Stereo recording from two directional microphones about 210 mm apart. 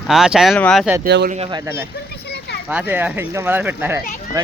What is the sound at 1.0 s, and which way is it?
Speech, 50° right (ahead or behind).